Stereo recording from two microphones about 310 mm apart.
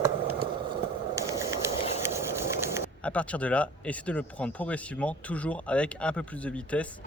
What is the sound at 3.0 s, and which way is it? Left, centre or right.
Speech, centre.